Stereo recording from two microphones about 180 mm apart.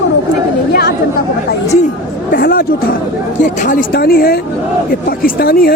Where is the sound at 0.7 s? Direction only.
60° left (ahead or behind).